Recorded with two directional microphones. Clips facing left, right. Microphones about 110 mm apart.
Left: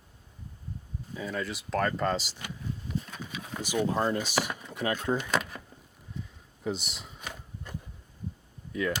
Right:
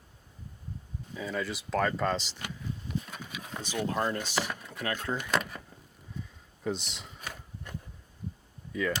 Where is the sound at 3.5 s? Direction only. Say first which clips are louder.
Left 3 dB; 10° left (ahead or behind).